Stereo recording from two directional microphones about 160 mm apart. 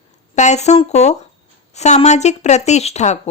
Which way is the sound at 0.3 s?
45° left (ahead or behind).